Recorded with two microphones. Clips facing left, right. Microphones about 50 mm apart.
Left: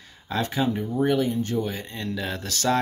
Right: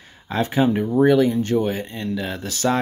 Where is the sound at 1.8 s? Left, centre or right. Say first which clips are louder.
Right 4 dB; centre.